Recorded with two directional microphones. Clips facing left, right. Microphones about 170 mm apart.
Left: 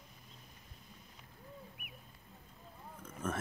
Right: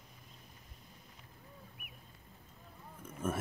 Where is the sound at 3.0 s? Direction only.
10° right (ahead or behind).